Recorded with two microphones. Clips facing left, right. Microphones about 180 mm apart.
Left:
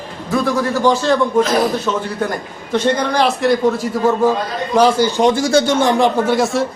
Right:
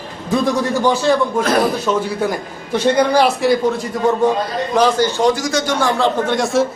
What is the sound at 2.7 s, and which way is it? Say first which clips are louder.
A man's voice: right 2 dB; 10° right (ahead or behind).